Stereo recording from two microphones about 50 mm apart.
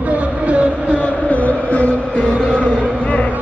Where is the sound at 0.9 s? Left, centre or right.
Left.